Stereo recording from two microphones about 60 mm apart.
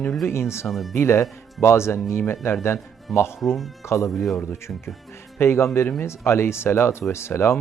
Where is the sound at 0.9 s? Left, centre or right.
Left.